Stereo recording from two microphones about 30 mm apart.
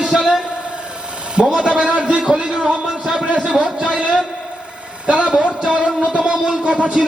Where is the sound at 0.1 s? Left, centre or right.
Right.